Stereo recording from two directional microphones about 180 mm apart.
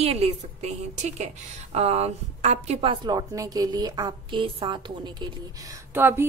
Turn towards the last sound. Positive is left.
turn(degrees=-10)  # may be behind; listen again after turning